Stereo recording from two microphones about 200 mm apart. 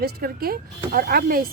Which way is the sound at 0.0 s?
50° right (ahead or behind).